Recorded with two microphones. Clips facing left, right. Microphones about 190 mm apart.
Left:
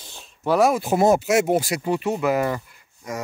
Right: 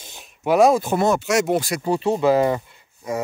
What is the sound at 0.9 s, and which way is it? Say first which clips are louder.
Speech: left 1 dB; 70° right (ahead or behind).